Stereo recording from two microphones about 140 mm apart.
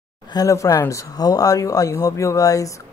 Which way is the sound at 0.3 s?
25° left (ahead or behind).